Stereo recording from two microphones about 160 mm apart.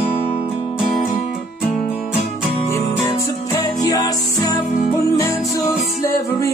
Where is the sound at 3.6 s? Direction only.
25° left (ahead or behind).